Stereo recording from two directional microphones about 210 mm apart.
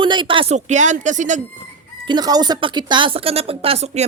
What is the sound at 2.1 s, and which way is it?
A woman's voice, 20° right (ahead or behind).